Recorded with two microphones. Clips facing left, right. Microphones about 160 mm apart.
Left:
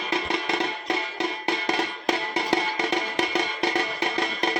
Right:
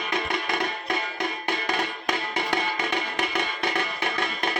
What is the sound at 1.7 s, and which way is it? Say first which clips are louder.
Music: left 3 dB; 35° left (ahead or behind).